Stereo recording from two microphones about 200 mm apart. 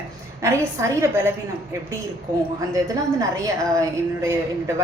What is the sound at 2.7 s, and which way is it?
A woman's voice, 15° right (ahead or behind).